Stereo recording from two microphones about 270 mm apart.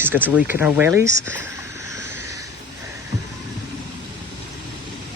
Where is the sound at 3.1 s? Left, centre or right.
Right.